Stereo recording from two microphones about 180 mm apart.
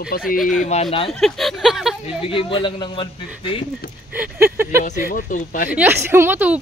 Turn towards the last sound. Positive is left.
turn(degrees=-10)  # may be behind; listen again after turning